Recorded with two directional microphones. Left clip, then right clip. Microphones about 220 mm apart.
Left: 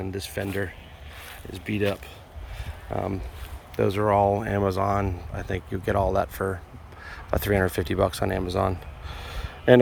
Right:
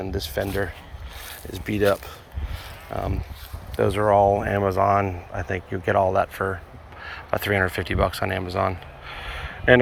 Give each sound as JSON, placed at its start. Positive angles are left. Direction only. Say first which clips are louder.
{"t": 0.2, "sound": "speech", "louder": "right 5 dB", "side_deg": 15}
{"t": 2.9, "sound": "speech", "louder": "even", "side_deg": 20}
{"t": 7.0, "sound": "a sound", "louder": "right 3 dB", "side_deg": 25}